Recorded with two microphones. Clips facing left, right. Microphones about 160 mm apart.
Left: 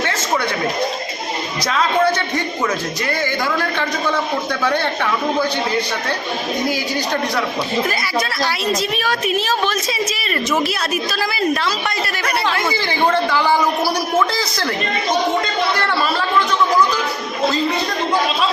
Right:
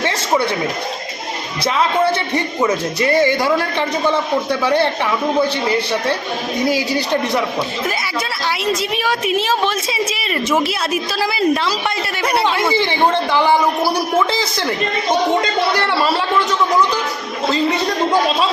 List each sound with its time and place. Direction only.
2.6 s speech: 35° right (ahead or behind)
4.6 s a woman's voice: 30° right (ahead or behind)
10.6 s a woman's voice: 25° right (ahead or behind)
15.8 s a woman's voice: 25° right (ahead or behind)